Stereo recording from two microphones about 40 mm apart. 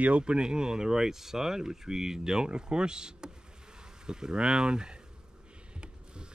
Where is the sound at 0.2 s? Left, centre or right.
Right.